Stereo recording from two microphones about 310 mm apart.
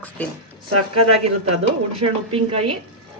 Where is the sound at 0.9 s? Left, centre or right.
Right.